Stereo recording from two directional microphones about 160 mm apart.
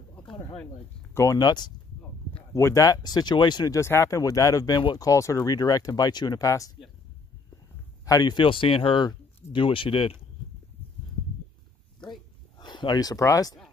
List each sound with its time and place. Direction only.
1.1 s speech: 20° left (ahead or behind)
8.0 s speech: 25° left (ahead or behind)
12.5 s speech: 25° left (ahead or behind)